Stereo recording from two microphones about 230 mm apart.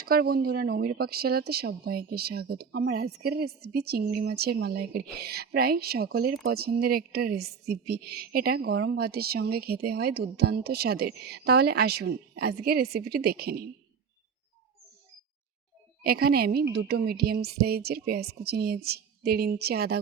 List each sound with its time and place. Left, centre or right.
0.0 s speech: right
16.0 s speech: right